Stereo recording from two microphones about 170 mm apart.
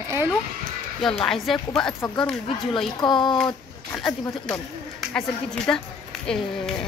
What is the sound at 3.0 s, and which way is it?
Speech, 25° left (ahead or behind).